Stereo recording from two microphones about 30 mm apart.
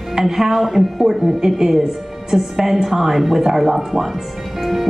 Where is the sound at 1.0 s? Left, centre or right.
Centre.